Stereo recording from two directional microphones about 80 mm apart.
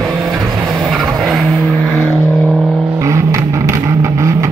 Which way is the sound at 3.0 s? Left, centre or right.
Right.